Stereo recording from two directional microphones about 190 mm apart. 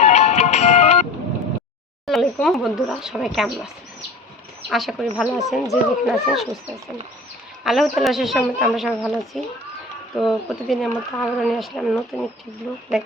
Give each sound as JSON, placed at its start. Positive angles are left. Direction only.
{"t": 0.0, "sound": "music", "side_deg": 35}
{"t": 2.0, "sound": "speech", "side_deg": 0}
{"t": 4.7, "sound": "speech", "side_deg": 0}